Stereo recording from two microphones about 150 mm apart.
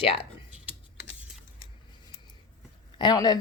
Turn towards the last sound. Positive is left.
turn(degrees=25)  # may be behind; listen again after turning